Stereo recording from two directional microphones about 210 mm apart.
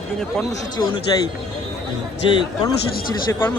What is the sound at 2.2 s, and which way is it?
Speech, 25° left (ahead or behind).